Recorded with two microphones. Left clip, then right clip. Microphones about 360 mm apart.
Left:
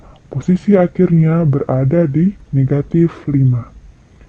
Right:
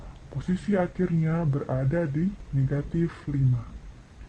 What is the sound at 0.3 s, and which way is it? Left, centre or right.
Speech, left.